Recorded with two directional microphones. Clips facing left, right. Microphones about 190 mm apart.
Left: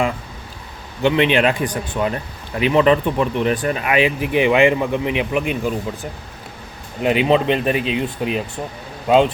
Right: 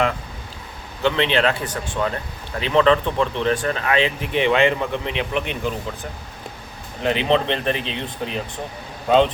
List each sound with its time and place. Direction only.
1.0 s speech: 15° left (ahead or behind)
7.0 s speech: 10° left (ahead or behind)